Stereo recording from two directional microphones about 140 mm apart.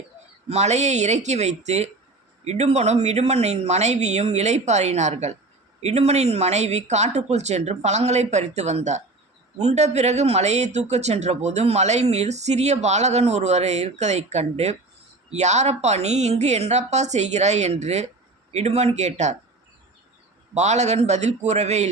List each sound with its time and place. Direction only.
0.4 s speech: 50° right (ahead or behind)
20.5 s speech: 55° right (ahead or behind)